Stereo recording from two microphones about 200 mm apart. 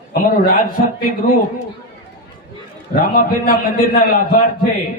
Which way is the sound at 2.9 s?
45° left (ahead or behind).